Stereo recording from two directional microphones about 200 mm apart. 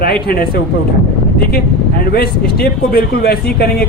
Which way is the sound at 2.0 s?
50° left (ahead or behind).